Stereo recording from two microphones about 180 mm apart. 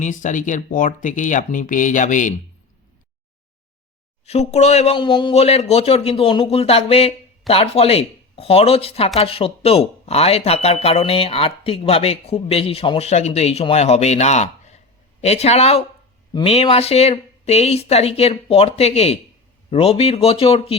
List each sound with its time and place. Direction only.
0.0 s speech: 45° left (ahead or behind)
4.3 s speech: 35° left (ahead or behind)